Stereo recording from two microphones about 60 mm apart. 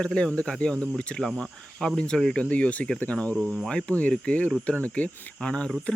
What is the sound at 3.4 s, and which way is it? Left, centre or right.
Cricket, centre.